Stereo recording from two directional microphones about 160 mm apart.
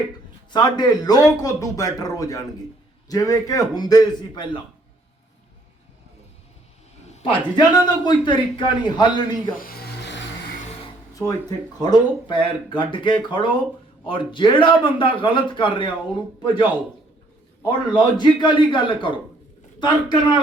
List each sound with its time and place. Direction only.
0.5 s speech: 25° left (ahead or behind)
7.5 s speech: 25° left (ahead or behind)
9.6 s a sound: 70° left (ahead or behind); by 10.2 s 90° left
11.1 s a sound: 20° left (ahead or behind)
11.8 s speech: 25° left (ahead or behind)
17.7 s speech: 30° left (ahead or behind)